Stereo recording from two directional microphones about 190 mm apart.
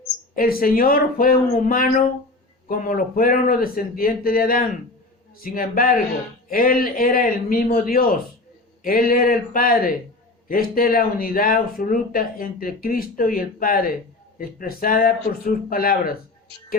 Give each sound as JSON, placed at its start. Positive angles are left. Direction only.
{"t": 0.3, "sound": "speech", "side_deg": 50}